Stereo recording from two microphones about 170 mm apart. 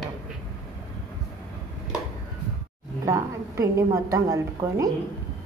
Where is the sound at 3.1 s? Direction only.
20° right (ahead or behind).